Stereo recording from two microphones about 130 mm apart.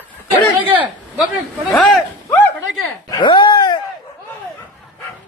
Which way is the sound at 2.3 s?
20° left (ahead or behind).